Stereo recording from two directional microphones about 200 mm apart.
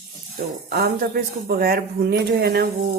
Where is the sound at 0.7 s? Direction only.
50° right (ahead or behind).